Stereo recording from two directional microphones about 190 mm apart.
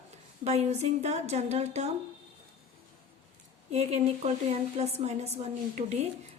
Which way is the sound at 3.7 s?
35° right (ahead or behind).